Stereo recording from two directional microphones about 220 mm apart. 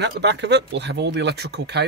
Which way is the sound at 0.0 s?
50° right (ahead or behind).